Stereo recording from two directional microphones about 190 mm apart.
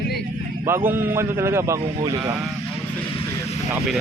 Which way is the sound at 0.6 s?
10° right (ahead or behind).